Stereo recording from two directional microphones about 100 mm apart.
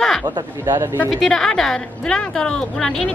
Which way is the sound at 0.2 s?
45° right (ahead or behind).